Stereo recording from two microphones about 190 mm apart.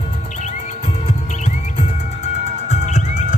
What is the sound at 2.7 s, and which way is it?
Music, 40° left (ahead or behind).